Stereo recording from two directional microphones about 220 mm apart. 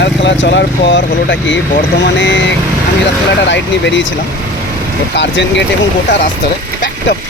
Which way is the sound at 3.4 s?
55° left (ahead or behind).